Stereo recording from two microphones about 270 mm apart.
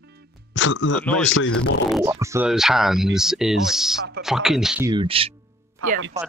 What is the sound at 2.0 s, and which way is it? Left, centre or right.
Speech, centre.